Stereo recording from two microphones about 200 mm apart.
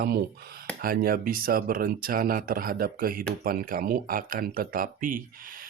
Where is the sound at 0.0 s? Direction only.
50° right (ahead or behind).